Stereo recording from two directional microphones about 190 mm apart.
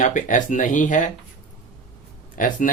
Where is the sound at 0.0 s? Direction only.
40° left (ahead or behind).